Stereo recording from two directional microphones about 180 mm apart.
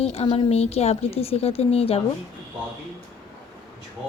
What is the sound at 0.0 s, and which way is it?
A woman's voice, 35° left (ahead or behind).